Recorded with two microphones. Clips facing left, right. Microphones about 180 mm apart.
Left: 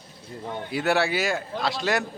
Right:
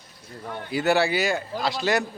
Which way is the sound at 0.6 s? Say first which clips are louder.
Right 2 dB; centre (ahead or behind).